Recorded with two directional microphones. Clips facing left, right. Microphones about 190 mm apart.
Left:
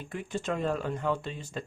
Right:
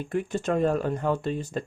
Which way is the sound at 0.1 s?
45° right (ahead or behind).